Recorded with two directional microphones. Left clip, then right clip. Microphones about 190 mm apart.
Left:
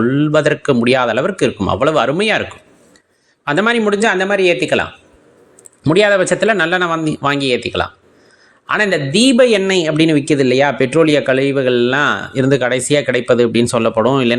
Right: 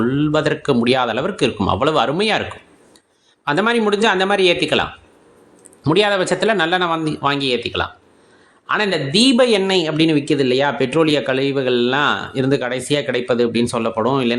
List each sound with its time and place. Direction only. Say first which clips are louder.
0.0 s speech: left 4 dB; 15° left (ahead or behind)